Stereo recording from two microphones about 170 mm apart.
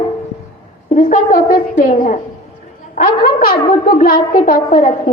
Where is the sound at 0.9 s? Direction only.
55° left (ahead or behind).